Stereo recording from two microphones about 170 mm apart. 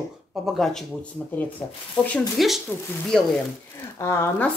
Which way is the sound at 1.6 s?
15° left (ahead or behind).